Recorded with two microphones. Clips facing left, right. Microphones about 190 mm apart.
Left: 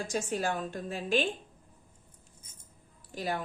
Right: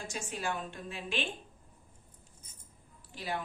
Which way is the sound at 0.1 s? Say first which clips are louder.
Left 5 dB; 40° left (ahead or behind).